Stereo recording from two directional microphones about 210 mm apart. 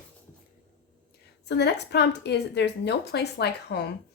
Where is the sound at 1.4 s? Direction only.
55° left (ahead or behind).